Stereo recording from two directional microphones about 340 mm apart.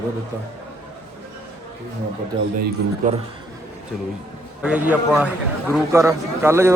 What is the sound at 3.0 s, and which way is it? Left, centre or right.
Speech, right.